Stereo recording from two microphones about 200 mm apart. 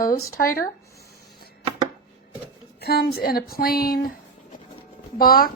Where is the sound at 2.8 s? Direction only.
50° left (ahead or behind).